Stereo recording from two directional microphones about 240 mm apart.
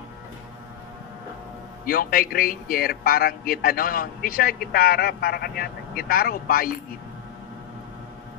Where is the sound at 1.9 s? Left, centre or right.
Left.